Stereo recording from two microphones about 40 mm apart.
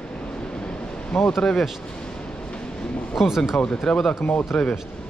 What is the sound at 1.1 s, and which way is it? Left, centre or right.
Speech, left.